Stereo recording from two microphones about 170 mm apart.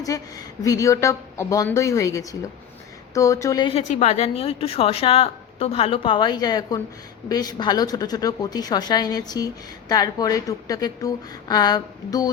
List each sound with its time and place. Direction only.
0.0 s a woman's voice: 20° left (ahead or behind)